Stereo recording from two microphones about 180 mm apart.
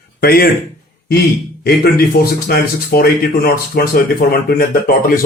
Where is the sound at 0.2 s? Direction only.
55° left (ahead or behind).